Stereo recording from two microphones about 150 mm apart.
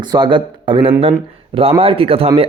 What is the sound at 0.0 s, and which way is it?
Speech, 30° right (ahead or behind).